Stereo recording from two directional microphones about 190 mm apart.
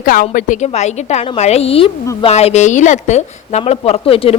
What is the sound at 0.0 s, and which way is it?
Speech, 45° left (ahead or behind).